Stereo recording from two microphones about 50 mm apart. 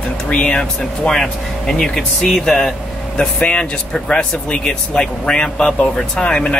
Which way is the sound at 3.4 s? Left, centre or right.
Left.